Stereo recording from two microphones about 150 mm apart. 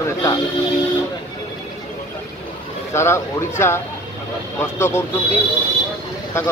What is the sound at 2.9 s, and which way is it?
Speech, 15° left (ahead or behind).